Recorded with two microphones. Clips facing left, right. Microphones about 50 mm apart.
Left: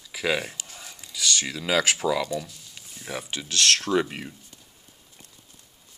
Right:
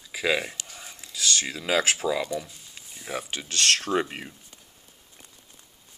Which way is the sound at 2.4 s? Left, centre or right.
Right.